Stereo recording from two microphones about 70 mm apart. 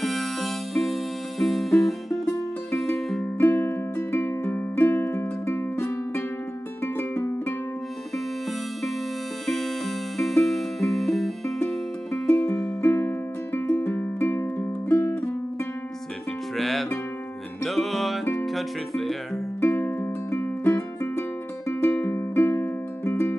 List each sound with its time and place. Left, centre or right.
0.0 s music: centre
3.3 s music: left
9.5 s music: centre
12.8 s music: left
16.5 s music: centre
19.6 s music: left